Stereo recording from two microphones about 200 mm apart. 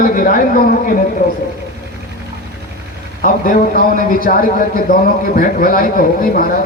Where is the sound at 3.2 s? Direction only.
45° left (ahead or behind).